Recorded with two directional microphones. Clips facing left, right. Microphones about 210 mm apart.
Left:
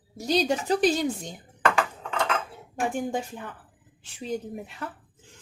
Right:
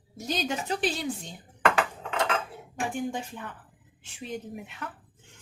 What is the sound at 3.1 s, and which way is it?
A woman's voice, 40° left (ahead or behind).